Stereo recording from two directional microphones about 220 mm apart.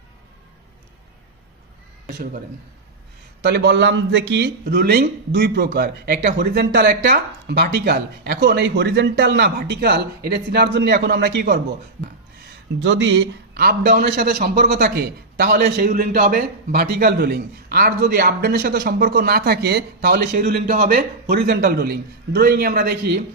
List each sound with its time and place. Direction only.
3.4 s a man's voice: 50° right (ahead or behind)
12.8 s a man's voice: 55° right (ahead or behind)